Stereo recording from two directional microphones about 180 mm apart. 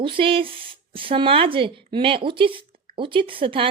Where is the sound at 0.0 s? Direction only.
30° right (ahead or behind).